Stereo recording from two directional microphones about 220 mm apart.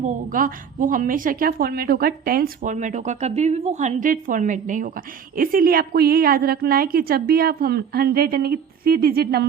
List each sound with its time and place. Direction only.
0.0 s a woman's voice: 40° right (ahead or behind)